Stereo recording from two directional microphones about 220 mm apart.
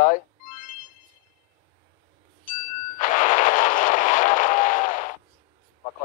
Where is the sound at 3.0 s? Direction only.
35° left (ahead or behind).